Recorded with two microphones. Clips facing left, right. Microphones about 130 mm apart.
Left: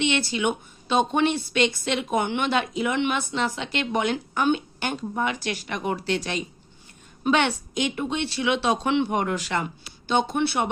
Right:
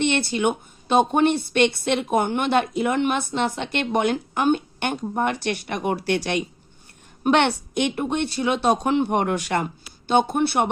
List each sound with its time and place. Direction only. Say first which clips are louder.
0.0 s a woman's voice: right 3 dB; 55° right (ahead or behind)
4.8 s a woman's voice: right 3 dB; 55° right (ahead or behind)
9.0 s a woman's voice: right 3 dB; 55° right (ahead or behind)